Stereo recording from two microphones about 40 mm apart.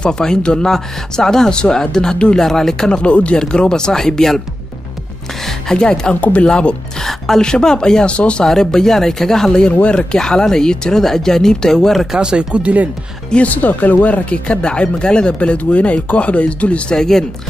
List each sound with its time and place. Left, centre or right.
0.0 s speech: centre
3.0 s speech: left; by 4.4 s centre
5.4 s music: centre
6.4 s speech: left
7.0 s speech: centre; by 8.5 s left
8.5 s speech: centre
9.7 s speech: left
10.1 s speech: centre
12.2 s speech: right
13.4 s speech: left
15.3 s speech: left
16.9 s speech: centre